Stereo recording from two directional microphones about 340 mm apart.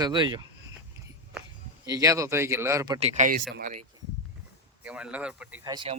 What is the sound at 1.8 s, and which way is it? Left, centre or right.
Speech, centre.